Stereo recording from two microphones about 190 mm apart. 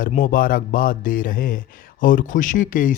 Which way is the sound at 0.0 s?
45° left (ahead or behind).